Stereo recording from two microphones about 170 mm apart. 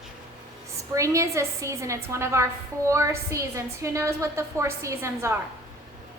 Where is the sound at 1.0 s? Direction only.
20° right (ahead or behind).